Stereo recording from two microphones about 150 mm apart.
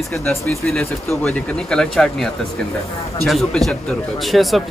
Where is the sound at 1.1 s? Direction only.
10° left (ahead or behind).